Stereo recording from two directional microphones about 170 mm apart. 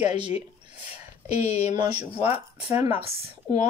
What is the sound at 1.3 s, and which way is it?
Speech, 40° left (ahead or behind).